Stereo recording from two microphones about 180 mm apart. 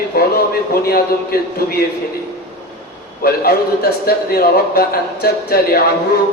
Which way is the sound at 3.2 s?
55° left (ahead or behind).